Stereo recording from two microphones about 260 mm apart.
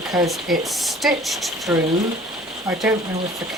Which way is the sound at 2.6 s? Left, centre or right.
Centre.